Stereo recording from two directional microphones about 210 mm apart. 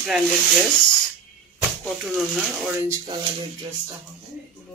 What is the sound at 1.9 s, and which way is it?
Speech, centre (ahead or behind).